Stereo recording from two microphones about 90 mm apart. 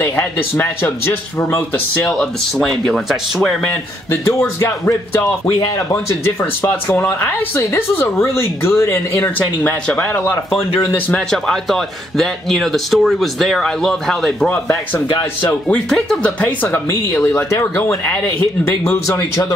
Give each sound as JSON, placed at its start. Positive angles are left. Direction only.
{"t": 0.0, "sound": "speech", "side_deg": 30}
{"t": 2.0, "sound": "speech", "side_deg": 0}
{"t": 4.6, "sound": "speech", "side_deg": 30}
{"t": 5.5, "sound": "speech", "side_deg": 40}
{"t": 6.2, "sound": "speech", "side_deg": 25}
{"t": 9.2, "sound": "speech", "side_deg": 20}
{"t": 11.4, "sound": "speech", "side_deg": 5}
{"t": 15.9, "sound": "speech", "side_deg": 10}
{"t": 17.3, "sound": "speech", "side_deg": 35}
{"t": 18.6, "sound": "speech", "side_deg": 25}